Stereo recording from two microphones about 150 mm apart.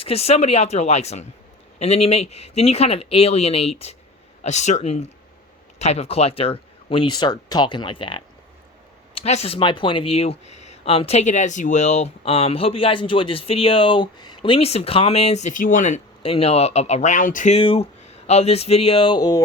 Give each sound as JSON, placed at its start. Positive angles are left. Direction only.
{"t": 0.0, "sound": "speech", "side_deg": 40}
{"t": 16.2, "sound": "speech", "side_deg": 40}
{"t": 17.5, "sound": "speech", "side_deg": 40}